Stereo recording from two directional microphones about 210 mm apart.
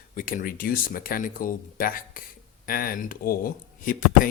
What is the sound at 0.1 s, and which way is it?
Speech, 40° left (ahead or behind).